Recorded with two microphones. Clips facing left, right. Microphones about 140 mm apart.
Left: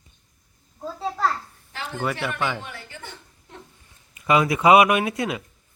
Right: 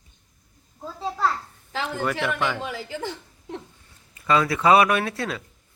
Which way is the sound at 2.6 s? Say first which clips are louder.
Right 8 dB; 90° right.